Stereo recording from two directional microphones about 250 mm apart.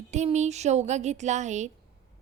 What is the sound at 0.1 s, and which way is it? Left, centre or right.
A woman's voice, right.